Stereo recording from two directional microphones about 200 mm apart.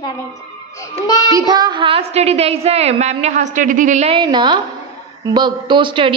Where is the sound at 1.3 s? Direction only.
20° right (ahead or behind); by 4.2 s 35° right (ahead or behind).